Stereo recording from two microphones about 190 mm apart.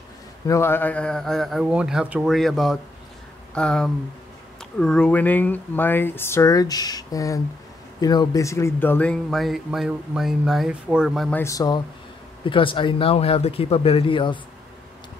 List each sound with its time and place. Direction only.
0.5 s speech: 15° left (ahead or behind)
11.4 s speech: 20° left (ahead or behind)